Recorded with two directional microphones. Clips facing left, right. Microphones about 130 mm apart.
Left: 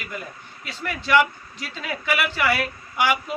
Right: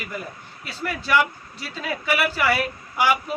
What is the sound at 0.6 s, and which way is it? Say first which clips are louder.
A man's voice: right 1 dB; 5° right (ahead or behind).